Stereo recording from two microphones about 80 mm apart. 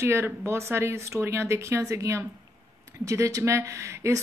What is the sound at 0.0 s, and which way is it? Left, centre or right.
Speech, right.